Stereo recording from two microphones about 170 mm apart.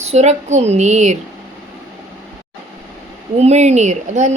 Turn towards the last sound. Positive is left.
turn(degrees=-45)  # may be behind; listen again after turning